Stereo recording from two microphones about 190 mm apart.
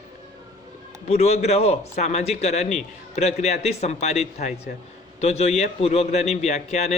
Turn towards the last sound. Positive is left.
turn(degrees=35)  # may be behind; listen again after turning